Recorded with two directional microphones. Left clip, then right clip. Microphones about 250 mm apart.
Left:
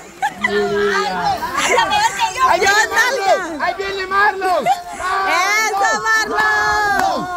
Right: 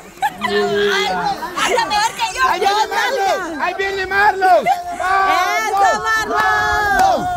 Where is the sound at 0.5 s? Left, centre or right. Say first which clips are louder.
Right 2 dB; right.